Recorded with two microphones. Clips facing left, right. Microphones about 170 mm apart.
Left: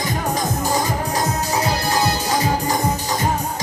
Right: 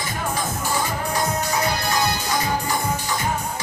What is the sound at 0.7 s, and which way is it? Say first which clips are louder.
Music: left 3 dB; 40° left (ahead or behind).